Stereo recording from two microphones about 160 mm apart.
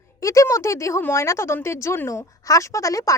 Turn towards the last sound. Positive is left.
turn(degrees=20)  # may be behind; listen again after turning